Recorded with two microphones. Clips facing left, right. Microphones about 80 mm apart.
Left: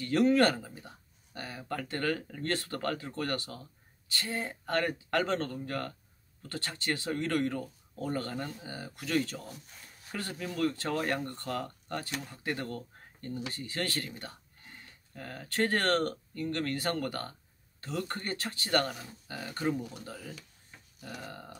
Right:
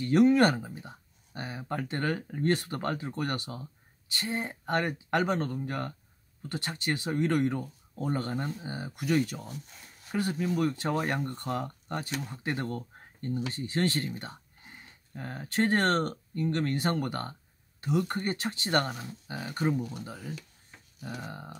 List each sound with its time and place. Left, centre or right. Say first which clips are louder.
0.0 s speech: right 3 dB; centre